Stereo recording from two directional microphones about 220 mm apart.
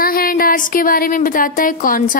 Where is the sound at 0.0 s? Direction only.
40° left (ahead or behind).